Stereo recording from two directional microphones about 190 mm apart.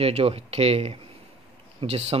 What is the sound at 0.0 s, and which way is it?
Speech, 35° right (ahead or behind).